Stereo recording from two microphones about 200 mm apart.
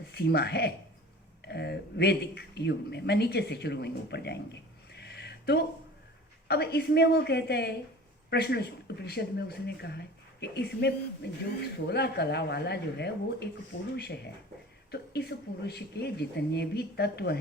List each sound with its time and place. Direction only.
0.1 s speech: 55° left (ahead or behind)
4.9 s a sound: 55° left (ahead or behind)
6.5 s speech: 55° left (ahead or behind)